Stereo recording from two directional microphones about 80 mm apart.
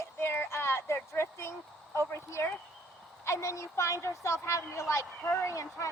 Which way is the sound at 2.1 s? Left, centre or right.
Left.